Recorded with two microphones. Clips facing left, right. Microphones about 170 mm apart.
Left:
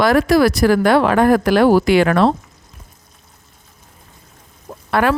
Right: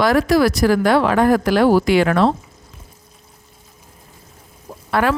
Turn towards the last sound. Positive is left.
turn(degrees=60)  # may be behind; listen again after turning